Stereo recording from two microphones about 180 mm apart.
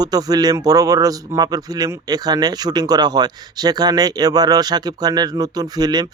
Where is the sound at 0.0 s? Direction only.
20° right (ahead or behind).